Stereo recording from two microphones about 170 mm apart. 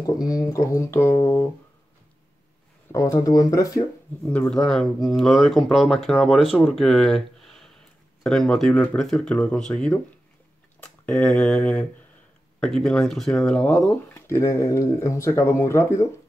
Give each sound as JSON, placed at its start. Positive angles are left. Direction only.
{"t": 0.0, "sound": "speech", "side_deg": 20}
{"t": 2.9, "sound": "speech", "side_deg": 20}
{"t": 4.3, "sound": "speech", "side_deg": 5}
{"t": 14.1, "sound": "speech", "side_deg": 15}